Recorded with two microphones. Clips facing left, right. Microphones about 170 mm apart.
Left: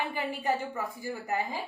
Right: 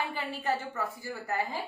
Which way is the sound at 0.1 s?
15° left (ahead or behind).